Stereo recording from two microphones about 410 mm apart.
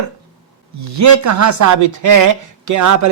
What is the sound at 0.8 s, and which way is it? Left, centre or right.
Speech, right.